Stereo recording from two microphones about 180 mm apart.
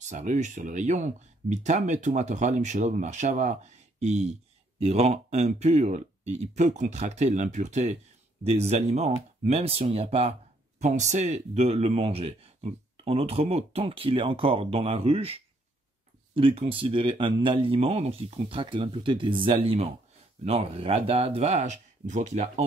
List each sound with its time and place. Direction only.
0.0 s speech: 45° right (ahead or behind)